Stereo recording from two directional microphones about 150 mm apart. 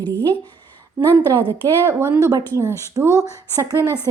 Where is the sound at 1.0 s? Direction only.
10° left (ahead or behind).